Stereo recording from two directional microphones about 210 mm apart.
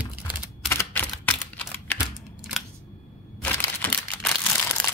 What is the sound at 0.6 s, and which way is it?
Camera, 10° left (ahead or behind).